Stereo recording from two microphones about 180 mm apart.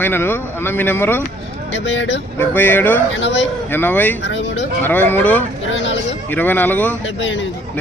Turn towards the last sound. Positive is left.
turn(degrees=90)